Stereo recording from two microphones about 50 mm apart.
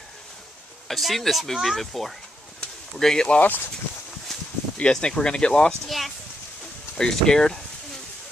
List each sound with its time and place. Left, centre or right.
0.8 s speech: centre
3.3 s speech: left
4.3 s a sound: centre
4.7 s speech: centre
5.9 s speech: centre
7.0 s speech: centre